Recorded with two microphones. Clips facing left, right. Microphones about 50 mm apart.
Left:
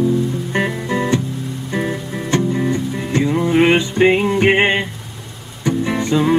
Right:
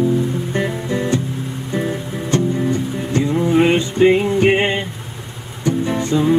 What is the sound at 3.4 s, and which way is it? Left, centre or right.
Music, left.